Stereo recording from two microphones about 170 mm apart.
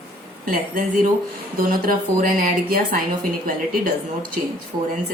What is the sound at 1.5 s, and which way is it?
A woman's voice, 55° right (ahead or behind).